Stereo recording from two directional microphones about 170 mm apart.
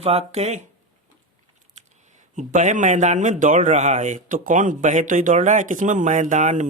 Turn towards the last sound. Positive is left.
turn(degrees=-45)  # may be behind; listen again after turning